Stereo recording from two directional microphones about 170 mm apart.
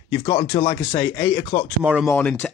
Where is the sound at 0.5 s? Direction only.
30° left (ahead or behind).